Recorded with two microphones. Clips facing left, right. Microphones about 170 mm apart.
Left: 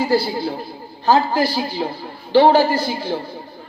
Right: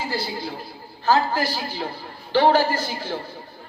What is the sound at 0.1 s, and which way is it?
Speech, 30° left (ahead or behind).